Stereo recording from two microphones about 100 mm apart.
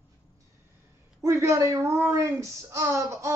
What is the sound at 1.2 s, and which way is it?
A woman's voice, 30° right (ahead or behind).